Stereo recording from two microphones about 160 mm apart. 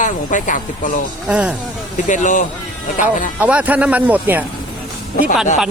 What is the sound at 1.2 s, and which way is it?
Speech, 5° right (ahead or behind).